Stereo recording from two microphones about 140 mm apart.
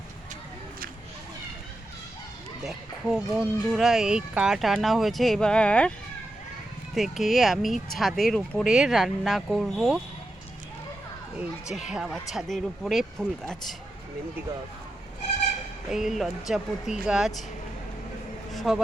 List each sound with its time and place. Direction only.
2.6 s speech: 5° right (ahead or behind)
6.9 s speech: centre (ahead or behind)
11.3 s speech: 5° right (ahead or behind)
15.9 s speech: 5° right (ahead or behind)
18.5 s a sound: centre (ahead or behind)